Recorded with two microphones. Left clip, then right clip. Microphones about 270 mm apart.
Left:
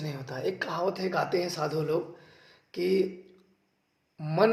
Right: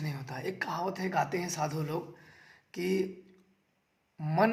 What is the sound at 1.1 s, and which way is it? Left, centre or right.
Speech, right.